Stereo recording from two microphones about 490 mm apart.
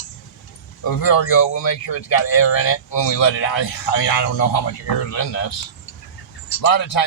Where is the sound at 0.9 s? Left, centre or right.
Left.